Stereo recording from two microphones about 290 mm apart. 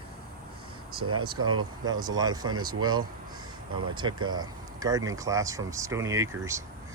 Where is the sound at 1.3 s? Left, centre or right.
Right.